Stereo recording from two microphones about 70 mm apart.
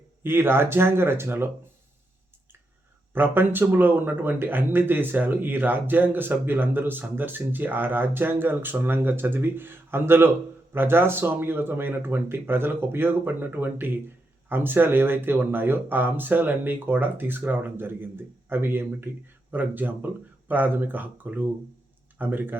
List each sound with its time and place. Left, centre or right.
0.2 s speech: right
3.1 s speech: right